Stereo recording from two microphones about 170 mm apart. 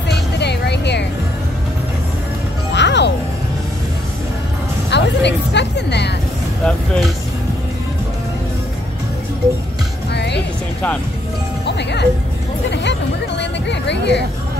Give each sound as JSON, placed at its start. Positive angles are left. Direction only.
{"t": 0.4, "sound": "music", "side_deg": 80}
{"t": 2.7, "sound": "music", "side_deg": 90}
{"t": 4.9, "sound": "vehicle", "side_deg": 90}
{"t": 6.6, "sound": "vehicle", "side_deg": 5}
{"t": 10.1, "sound": "music", "side_deg": 80}
{"t": 11.6, "sound": "music", "side_deg": 80}
{"t": 13.4, "sound": "a sound", "side_deg": 90}